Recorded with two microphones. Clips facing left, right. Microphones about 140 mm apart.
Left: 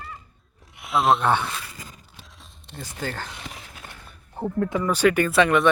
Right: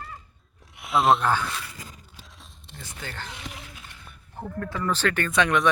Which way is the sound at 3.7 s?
55° left (ahead or behind).